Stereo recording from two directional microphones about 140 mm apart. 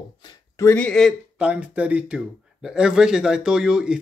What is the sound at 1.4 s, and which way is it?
Speech, 10° right (ahead or behind).